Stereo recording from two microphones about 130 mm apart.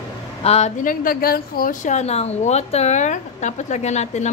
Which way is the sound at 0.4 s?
55° left (ahead or behind).